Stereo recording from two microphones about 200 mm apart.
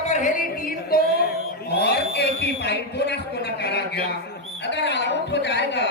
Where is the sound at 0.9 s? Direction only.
50° left (ahead or behind).